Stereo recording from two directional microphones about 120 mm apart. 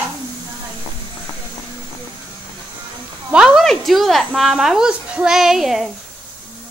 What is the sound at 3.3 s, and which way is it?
A woman's voice, 5° right (ahead or behind).